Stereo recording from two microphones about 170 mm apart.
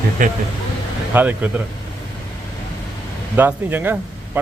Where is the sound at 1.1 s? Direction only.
10° right (ahead or behind).